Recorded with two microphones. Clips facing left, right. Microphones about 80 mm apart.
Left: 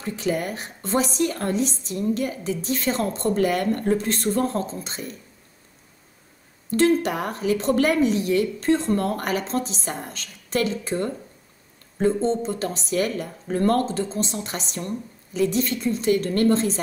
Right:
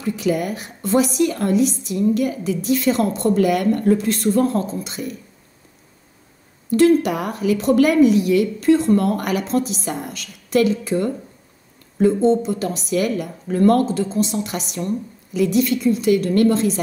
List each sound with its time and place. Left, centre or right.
0.0 s speech: left
6.8 s speech: left
12.4 s speech: left